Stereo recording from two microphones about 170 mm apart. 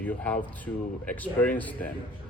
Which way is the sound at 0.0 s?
10° left (ahead or behind).